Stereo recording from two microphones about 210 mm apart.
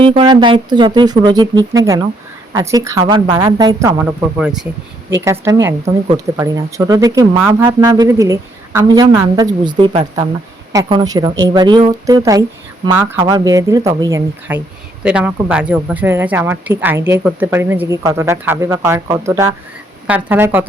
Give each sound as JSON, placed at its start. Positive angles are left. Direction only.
{"t": 0.0, "sound": "a woman's voice", "side_deg": -25}
{"t": 4.4, "sound": "speech", "side_deg": -5}
{"t": 5.1, "sound": "a woman's voice", "side_deg": -15}